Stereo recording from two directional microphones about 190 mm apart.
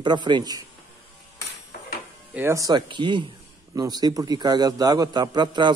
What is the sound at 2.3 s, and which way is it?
Speech, 15° right (ahead or behind).